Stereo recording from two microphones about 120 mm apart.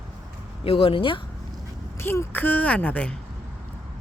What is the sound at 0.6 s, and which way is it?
Speech, 50° left (ahead or behind).